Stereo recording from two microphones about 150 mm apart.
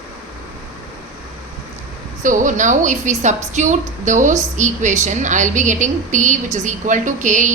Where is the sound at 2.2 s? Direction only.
60° right (ahead or behind).